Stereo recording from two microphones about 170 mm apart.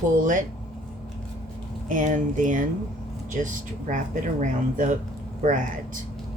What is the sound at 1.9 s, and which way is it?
Speech, 50° right (ahead or behind).